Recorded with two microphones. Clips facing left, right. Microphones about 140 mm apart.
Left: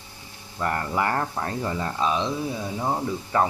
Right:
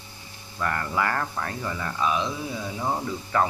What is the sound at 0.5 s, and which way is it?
Speech, 25° left (ahead or behind).